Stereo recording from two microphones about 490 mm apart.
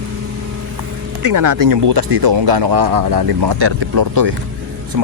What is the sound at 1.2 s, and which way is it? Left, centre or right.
Speech, right.